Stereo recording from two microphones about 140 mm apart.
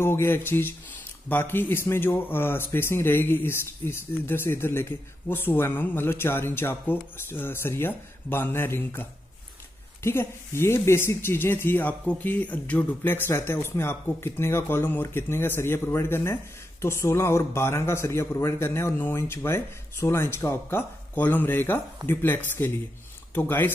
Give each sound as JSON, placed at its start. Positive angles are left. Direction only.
{"t": 0.0, "sound": "speech", "side_deg": 15}
{"t": 10.0, "sound": "a man's voice", "side_deg": 20}